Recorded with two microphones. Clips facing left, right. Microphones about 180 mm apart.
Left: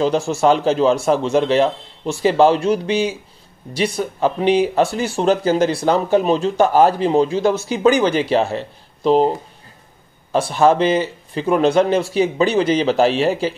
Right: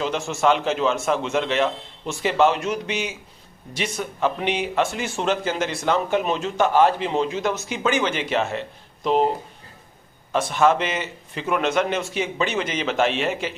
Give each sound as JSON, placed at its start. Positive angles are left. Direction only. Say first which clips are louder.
{"t": 0.0, "sound": "speech", "louder": "left 6 dB", "side_deg": 35}
{"t": 10.3, "sound": "speech", "louder": "left 4 dB", "side_deg": 35}